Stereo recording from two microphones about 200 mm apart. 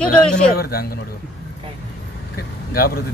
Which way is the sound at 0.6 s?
50° left (ahead or behind).